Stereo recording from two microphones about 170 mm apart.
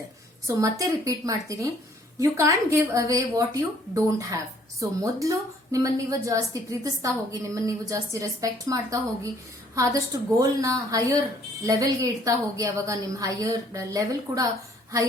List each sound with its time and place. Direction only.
0.4 s a woman's voice: 20° right (ahead or behind)